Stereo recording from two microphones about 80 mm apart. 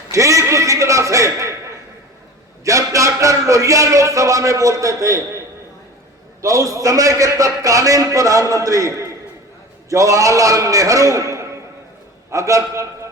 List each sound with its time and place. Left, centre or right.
0.1 s a sound: right
2.6 s a man's voice: right
6.4 s a man's voice: right